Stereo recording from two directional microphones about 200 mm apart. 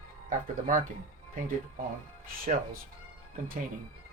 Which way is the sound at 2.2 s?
45° right (ahead or behind).